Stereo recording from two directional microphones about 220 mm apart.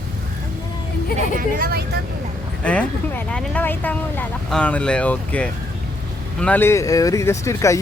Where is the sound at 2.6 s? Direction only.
5° left (ahead or behind).